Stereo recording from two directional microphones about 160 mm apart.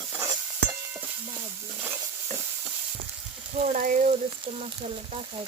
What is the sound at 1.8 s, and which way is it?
Stir, 15° right (ahead or behind).